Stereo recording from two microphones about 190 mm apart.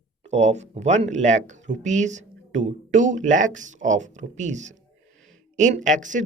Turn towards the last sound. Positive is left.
turn(degrees=-40)  # may be behind; listen again after turning